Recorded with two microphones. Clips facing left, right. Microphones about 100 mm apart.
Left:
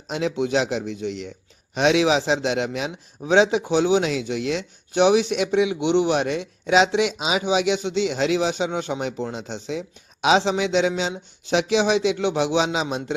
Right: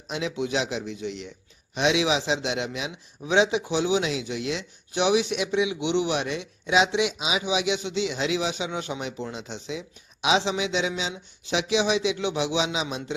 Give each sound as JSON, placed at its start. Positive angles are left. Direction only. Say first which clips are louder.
{"t": 0.1, "sound": "speech", "louder": "left 5 dB", "side_deg": 45}
{"t": 3.8, "sound": "speech", "louder": "left 5 dB", "side_deg": 50}